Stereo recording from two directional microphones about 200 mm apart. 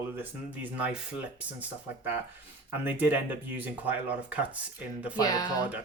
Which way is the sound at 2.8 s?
10° right (ahead or behind).